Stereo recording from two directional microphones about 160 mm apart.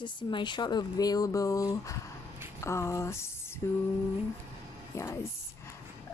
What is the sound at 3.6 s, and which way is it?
Speech, 20° left (ahead or behind).